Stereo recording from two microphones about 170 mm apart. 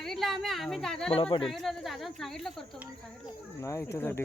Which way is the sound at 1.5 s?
Centre (ahead or behind).